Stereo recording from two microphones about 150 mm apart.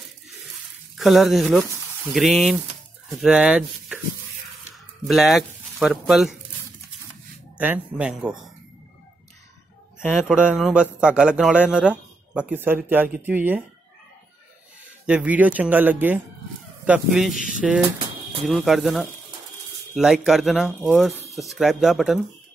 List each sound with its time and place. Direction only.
0.9 s speech: centre (ahead or behind)
5.0 s speech: centre (ahead or behind)
7.5 s a man's voice: 10° right (ahead or behind)
9.9 s a man's voice: 5° right (ahead or behind)
15.0 s a man's voice: 10° right (ahead or behind)
17.3 s speech: 60° left (ahead or behind)
18.5 s speech: centre (ahead or behind)